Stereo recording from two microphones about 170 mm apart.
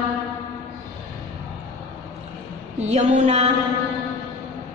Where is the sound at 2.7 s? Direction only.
40° right (ahead or behind).